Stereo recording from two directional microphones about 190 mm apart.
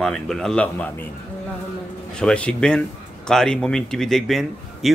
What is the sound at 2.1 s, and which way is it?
A man's voice, 5° left (ahead or behind).